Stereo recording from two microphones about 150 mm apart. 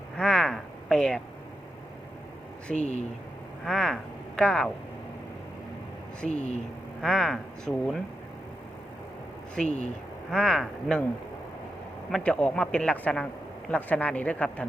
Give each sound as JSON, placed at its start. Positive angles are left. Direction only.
{"t": 0.2, "sound": "a sound", "side_deg": 5}
{"t": 2.7, "sound": "speech", "side_deg": 50}
{"t": 3.6, "sound": "speech", "side_deg": 5}
{"t": 6.3, "sound": "speech", "side_deg": 50}
{"t": 7.0, "sound": "speech", "side_deg": 0}
{"t": 9.6, "sound": "speech", "side_deg": 50}
{"t": 10.3, "sound": "speech", "side_deg": 5}
{"t": 12.1, "sound": "speech", "side_deg": 5}